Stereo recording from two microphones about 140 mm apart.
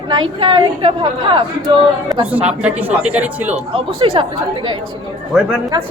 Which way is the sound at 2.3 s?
10° right (ahead or behind).